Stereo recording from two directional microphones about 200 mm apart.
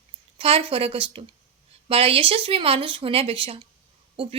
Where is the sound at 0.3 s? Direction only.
30° right (ahead or behind).